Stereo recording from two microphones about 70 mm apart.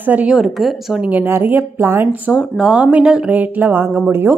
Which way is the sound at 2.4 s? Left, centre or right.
Centre.